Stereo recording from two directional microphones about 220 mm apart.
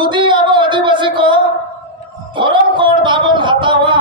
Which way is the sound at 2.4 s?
20° right (ahead or behind).